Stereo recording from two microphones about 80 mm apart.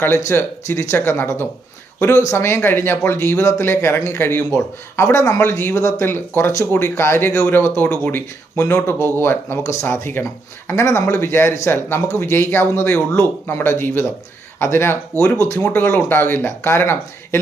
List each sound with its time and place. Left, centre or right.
0.0 s speech: left